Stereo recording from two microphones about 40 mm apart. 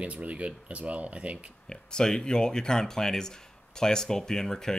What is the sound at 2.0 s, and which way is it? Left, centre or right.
Speech, centre.